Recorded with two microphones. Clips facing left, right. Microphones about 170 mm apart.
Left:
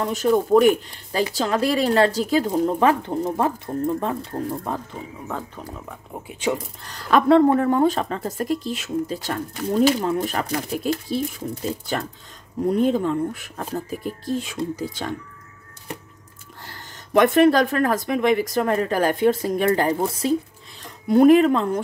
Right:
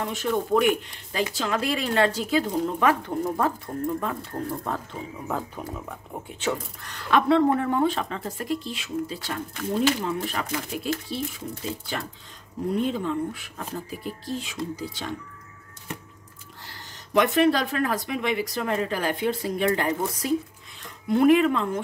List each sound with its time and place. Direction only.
0.0 s speech: 40° left (ahead or behind)
2.9 s speech: 25° left (ahead or behind)
5.9 s speech: 10° left (ahead or behind)
6.8 s speech: 35° left (ahead or behind)
16.6 s speech: 50° left (ahead or behind)